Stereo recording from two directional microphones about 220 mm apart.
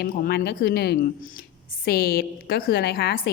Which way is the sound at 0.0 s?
45° left (ahead or behind).